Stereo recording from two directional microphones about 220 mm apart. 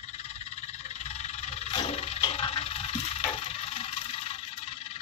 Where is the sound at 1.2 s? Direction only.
30° left (ahead or behind).